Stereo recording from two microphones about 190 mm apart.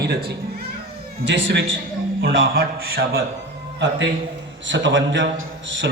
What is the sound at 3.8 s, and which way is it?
A man's voice, 70° right (ahead or behind).